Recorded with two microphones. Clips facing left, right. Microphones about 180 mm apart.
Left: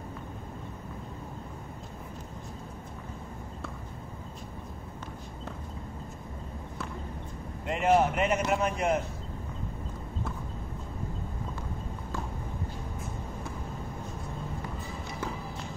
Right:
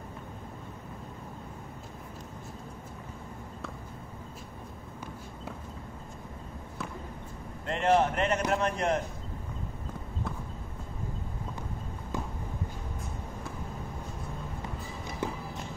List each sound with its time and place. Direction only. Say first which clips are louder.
7.6 s speech: left 1 dB; 10° left (ahead or behind)